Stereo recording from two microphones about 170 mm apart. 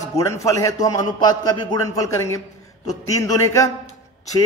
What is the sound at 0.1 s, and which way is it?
A man's voice, 20° left (ahead or behind).